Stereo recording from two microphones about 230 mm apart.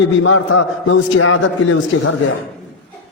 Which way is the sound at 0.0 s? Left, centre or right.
Left.